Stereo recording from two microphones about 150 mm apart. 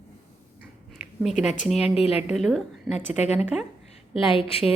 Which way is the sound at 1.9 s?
40° left (ahead or behind).